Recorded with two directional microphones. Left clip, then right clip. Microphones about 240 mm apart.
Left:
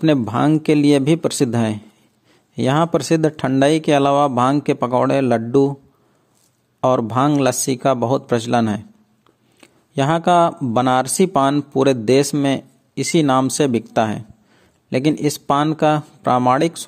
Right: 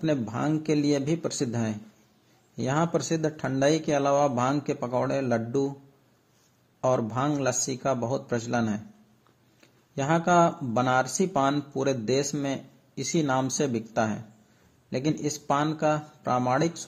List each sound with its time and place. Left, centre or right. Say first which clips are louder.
0.0 s speech: left 11 dB; left
6.8 s speech: left 9 dB; left